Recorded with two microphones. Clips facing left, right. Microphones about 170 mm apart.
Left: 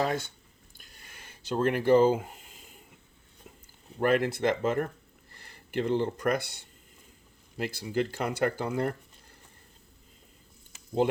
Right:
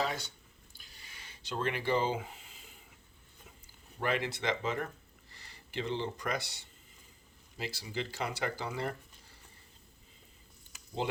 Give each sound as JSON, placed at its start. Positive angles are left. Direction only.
{"t": 0.0, "sound": "speech", "side_deg": 50}
{"t": 0.8, "sound": "a sound", "side_deg": 50}
{"t": 4.0, "sound": "speech", "side_deg": 50}